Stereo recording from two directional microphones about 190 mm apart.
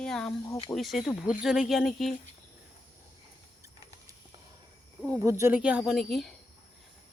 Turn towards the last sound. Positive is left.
turn(degrees=0)  # may be behind; listen again after turning